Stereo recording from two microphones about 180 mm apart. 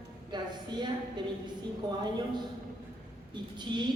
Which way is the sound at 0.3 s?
25° right (ahead or behind).